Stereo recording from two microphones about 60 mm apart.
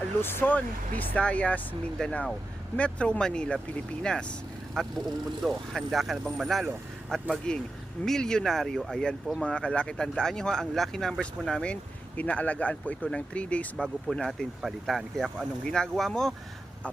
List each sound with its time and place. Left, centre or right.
0.2 s speech: left
2.0 s speech: centre
7.1 s speech: centre
11.6 s speech: left
13.7 s speech: centre
15.6 s speech: centre